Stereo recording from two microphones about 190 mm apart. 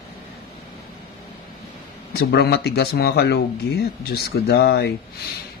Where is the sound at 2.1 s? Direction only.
55° left (ahead or behind).